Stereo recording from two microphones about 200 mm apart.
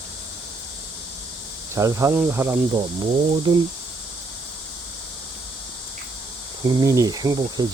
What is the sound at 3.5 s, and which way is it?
Speech, 25° right (ahead or behind).